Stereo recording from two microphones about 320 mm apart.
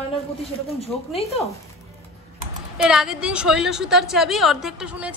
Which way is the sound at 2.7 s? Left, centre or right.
Centre.